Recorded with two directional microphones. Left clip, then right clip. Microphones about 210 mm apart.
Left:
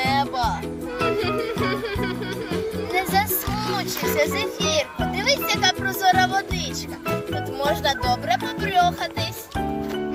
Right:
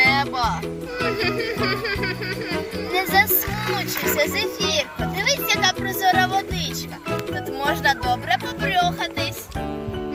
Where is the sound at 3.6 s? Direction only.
30° left (ahead or behind).